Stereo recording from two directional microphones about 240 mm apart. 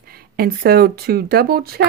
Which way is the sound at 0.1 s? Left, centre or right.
Right.